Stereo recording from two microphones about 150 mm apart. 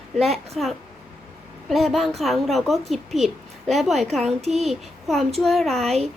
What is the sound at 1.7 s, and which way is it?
A woman's voice, centre (ahead or behind).